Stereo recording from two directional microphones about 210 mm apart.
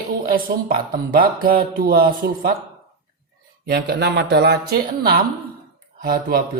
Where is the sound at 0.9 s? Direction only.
45° right (ahead or behind).